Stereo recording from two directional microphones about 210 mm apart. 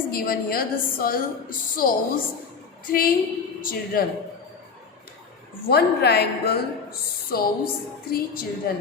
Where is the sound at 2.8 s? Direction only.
45° left (ahead or behind).